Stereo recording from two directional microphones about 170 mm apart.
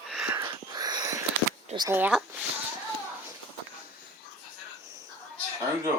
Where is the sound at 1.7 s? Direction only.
15° right (ahead or behind).